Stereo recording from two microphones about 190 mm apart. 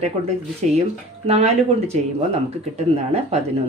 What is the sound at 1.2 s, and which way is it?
Speech, 35° right (ahead or behind).